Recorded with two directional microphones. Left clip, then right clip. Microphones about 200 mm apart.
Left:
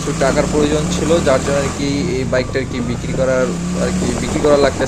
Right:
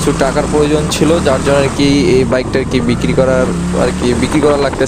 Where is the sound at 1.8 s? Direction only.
50° right (ahead or behind).